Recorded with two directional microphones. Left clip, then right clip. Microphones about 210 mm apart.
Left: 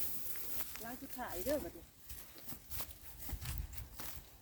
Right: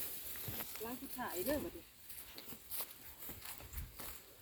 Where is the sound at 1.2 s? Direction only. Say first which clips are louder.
Right 1 dB; 25° left (ahead or behind).